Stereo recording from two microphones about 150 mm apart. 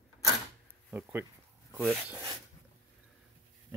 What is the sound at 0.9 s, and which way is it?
Speech, 10° right (ahead or behind).